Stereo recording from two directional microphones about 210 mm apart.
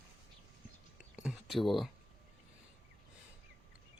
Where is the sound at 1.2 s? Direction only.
Centre (ahead or behind).